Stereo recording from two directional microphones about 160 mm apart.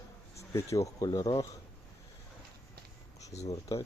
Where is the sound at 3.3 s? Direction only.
45° left (ahead or behind).